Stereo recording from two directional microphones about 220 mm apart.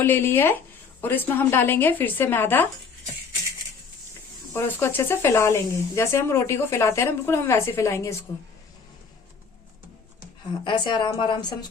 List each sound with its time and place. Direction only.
0.0 s speech: 10° left (ahead or behind)
4.5 s speech: 10° left (ahead or behind)
10.6 s speech: 20° left (ahead or behind)